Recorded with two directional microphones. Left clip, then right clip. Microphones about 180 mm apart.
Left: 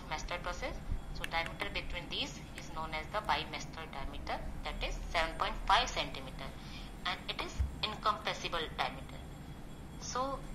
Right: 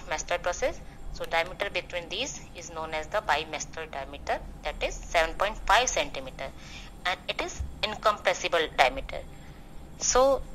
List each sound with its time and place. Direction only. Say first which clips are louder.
0.1 s a woman's voice: right 10 dB; 45° right (ahead or behind)
9.9 s a woman's voice: right 15 dB; 60° right (ahead or behind)